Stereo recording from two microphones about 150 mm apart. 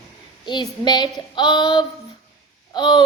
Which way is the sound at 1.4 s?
30° left (ahead or behind).